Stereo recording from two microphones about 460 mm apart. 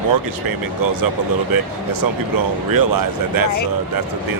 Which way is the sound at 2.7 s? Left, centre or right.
Right.